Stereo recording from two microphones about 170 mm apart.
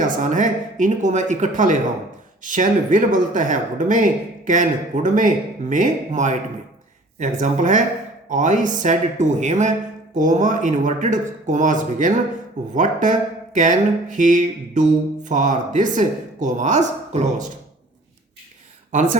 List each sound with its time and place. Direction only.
0.0 s speech: 45° right (ahead or behind)